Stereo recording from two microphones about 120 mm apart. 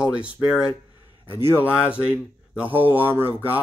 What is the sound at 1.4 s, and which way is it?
Speech, 15° right (ahead or behind).